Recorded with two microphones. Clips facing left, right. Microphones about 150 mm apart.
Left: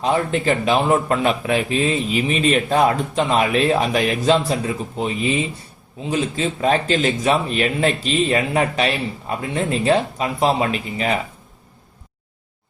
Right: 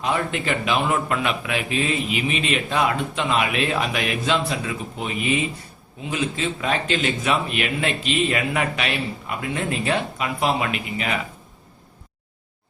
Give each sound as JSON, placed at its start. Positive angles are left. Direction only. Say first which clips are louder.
{"t": 0.0, "sound": "a man's voice", "louder": "left 5 dB", "side_deg": 35}